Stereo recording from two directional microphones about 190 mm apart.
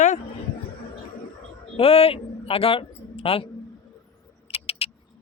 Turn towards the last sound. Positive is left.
turn(degrees=30)  # may be behind; listen again after turning